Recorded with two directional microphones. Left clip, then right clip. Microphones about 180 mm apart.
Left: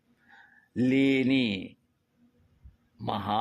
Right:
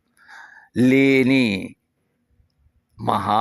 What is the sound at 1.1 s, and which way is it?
Speech, 25° right (ahead or behind).